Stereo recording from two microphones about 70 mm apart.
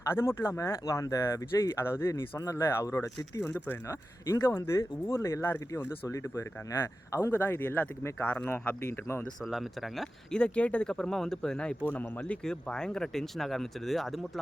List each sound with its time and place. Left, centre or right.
0.1 s speech: left
1.8 s speech: left
2.4 s speech: left
2.9 s speech: left
4.3 s speech: left
7.3 s speech: left
9.4 s speech: centre
10.3 s speech: centre
10.9 s speech: centre
11.9 s speech: left; by 14.2 s centre